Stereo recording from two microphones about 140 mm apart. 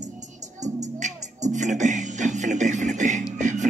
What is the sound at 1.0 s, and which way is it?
Music, 60° right (ahead or behind).